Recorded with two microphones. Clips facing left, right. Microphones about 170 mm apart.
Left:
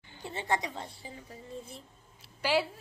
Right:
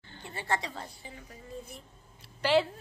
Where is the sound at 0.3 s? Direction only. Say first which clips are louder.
Left 1 dB; 20° left (ahead or behind).